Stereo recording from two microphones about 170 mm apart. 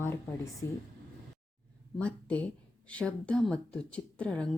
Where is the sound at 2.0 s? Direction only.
10° left (ahead or behind).